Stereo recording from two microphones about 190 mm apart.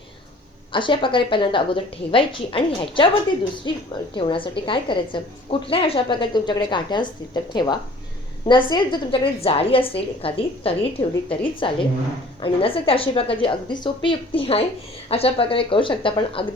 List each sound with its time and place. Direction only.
0.7 s a woman's voice: 25° left (ahead or behind)